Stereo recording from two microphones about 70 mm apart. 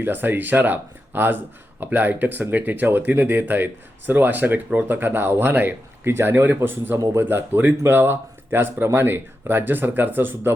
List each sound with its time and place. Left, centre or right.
0.0 s speech: right